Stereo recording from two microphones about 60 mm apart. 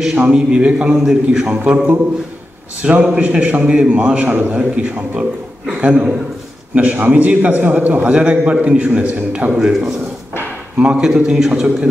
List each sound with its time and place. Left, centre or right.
0.0 s a man's voice: centre
0.9 s a man's voice: centre
1.5 s a man's voice: right
2.9 s a man's voice: right
9.6 s a man's voice: centre